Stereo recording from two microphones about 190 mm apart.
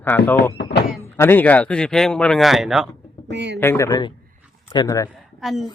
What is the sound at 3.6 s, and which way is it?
A man's voice, 15° left (ahead or behind).